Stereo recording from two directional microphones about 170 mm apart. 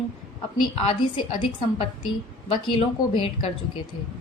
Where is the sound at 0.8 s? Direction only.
30° left (ahead or behind).